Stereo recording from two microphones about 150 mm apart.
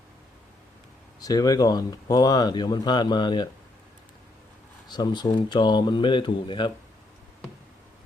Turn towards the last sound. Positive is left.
turn(degrees=30)  # may be behind; listen again after turning